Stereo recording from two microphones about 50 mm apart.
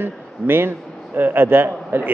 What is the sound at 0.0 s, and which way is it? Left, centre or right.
A man's voice, right.